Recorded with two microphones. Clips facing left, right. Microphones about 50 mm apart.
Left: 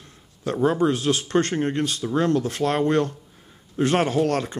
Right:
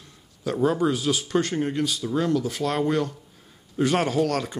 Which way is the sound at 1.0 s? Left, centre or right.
Left.